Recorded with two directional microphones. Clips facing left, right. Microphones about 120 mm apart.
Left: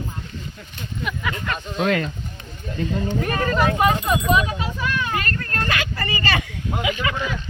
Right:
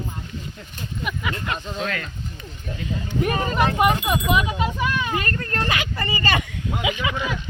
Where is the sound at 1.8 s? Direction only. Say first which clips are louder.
Left 7 dB; 40° left (ahead or behind).